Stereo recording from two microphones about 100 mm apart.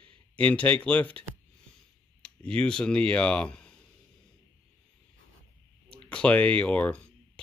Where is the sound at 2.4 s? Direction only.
10° left (ahead or behind).